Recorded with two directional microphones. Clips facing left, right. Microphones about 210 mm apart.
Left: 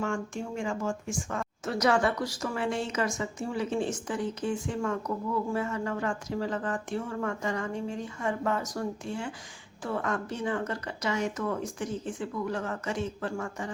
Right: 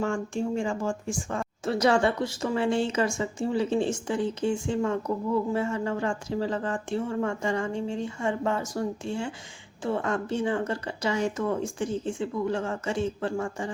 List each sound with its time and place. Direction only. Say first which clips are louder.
0.0 s a woman's voice: right 4 dB; 30° right (ahead or behind)